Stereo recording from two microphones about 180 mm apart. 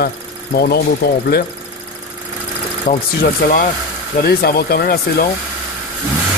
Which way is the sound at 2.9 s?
45° left (ahead or behind).